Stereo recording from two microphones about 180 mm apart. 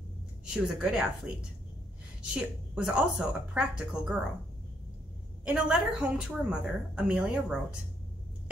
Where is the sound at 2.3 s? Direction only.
5° right (ahead or behind).